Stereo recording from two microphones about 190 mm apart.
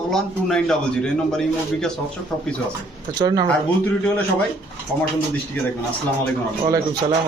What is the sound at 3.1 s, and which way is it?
Speech, 20° right (ahead or behind).